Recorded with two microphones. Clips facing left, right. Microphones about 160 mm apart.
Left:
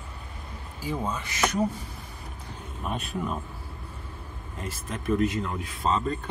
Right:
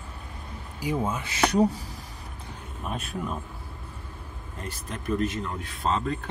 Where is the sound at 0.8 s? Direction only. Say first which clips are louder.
Right 3 dB; 10° right (ahead or behind).